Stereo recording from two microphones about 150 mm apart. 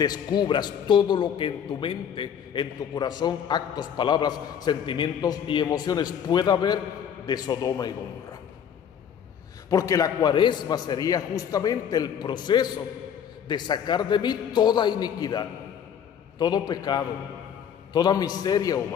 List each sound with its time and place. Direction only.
0.0 s a man's voice: 25° left (ahead or behind)
9.7 s a man's voice: 25° left (ahead or behind)